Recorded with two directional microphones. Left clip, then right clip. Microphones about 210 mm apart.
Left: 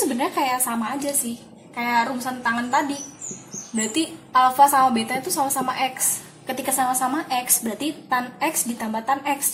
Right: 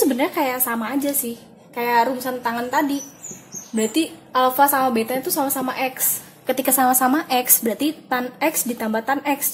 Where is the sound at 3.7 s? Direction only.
40° right (ahead or behind).